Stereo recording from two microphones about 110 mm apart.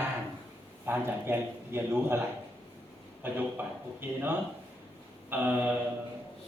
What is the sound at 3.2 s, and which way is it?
Speech, 20° right (ahead or behind).